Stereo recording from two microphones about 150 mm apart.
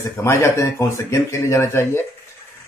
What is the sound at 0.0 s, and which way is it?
Speech, 20° left (ahead or behind).